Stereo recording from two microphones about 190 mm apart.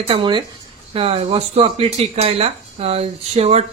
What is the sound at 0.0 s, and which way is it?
Speech, 25° right (ahead or behind).